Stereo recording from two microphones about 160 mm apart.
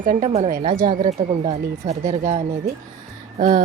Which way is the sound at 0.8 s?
25° right (ahead or behind).